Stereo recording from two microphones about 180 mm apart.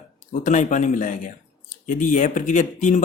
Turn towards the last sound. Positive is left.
turn(degrees=45)  # may be behind; listen again after turning